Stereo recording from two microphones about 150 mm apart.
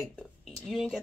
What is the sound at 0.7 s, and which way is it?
Speech, centre (ahead or behind).